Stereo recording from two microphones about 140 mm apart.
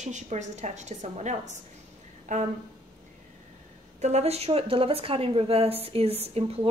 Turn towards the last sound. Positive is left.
turn(degrees=-45)  # may be behind; listen again after turning